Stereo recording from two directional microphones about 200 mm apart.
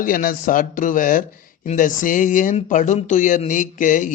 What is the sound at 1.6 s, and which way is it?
Speech, 40° left (ahead or behind).